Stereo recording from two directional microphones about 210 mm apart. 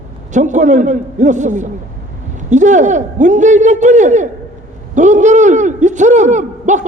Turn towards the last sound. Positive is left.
turn(degrees=-35)  # may be behind; listen again after turning